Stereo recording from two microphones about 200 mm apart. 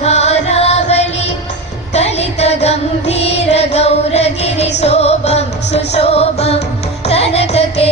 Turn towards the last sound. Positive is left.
turn(degrees=30)  # may be behind; listen again after turning